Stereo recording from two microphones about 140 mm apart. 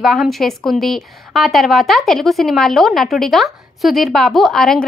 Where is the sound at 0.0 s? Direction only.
Centre (ahead or behind).